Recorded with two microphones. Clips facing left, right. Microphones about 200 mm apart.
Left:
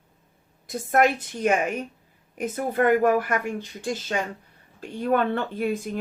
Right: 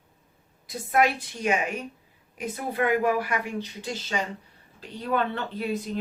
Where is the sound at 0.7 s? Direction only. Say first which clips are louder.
Left 3 dB; 45° left (ahead or behind).